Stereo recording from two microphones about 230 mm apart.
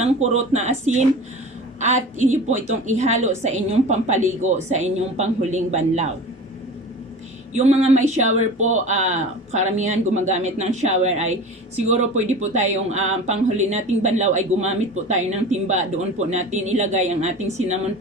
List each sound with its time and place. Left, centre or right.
0.0 s a woman's voice: right
7.5 s a woman's voice: right